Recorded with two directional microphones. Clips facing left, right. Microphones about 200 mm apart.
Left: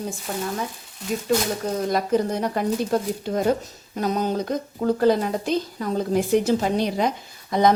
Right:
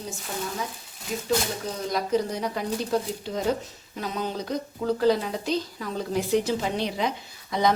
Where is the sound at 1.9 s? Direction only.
50° left (ahead or behind).